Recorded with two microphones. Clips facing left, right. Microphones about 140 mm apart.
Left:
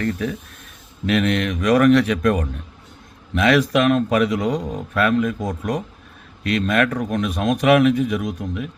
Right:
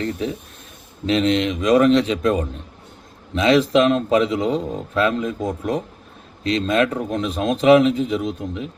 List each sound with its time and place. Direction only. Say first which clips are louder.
0.0 s speech: left 1 dB; 25° right (ahead or behind)